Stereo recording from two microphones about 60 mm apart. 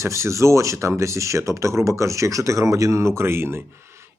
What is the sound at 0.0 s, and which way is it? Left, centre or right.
Speech, right.